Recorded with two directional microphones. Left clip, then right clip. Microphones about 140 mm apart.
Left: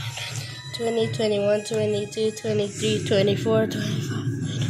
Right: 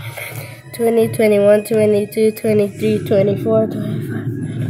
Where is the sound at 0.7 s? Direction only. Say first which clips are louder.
Right 10 dB; 35° right (ahead or behind).